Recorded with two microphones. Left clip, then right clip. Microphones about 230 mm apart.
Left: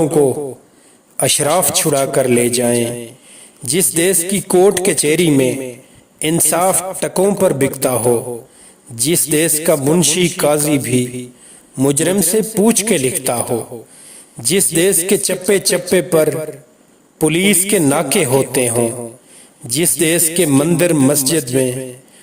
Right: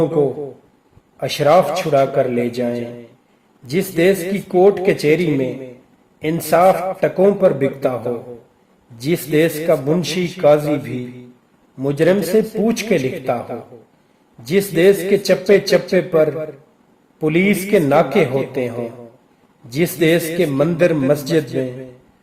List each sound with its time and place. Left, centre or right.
1.1 s a man's voice: left